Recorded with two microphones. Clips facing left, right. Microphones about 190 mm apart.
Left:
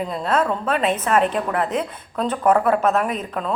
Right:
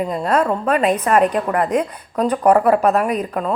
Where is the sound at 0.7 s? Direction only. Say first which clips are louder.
Right 5 dB; centre (ahead or behind).